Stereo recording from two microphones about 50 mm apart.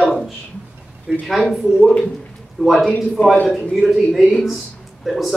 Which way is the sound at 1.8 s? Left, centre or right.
Left.